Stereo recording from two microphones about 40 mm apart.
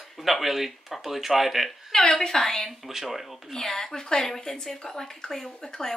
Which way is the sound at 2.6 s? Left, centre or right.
Centre.